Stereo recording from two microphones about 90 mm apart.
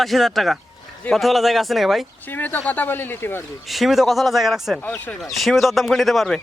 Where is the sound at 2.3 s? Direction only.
20° left (ahead or behind).